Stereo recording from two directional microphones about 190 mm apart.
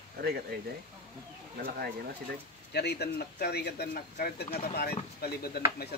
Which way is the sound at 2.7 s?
60° left (ahead or behind).